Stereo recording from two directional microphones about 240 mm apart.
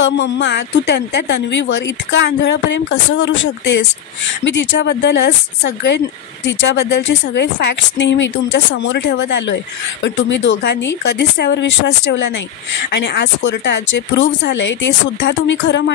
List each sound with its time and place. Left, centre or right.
0.0 s speech: left